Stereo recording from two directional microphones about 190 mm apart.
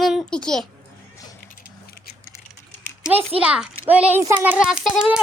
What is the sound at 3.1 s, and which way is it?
Speech, 30° right (ahead or behind).